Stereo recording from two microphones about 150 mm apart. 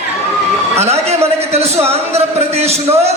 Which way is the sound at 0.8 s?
45° right (ahead or behind).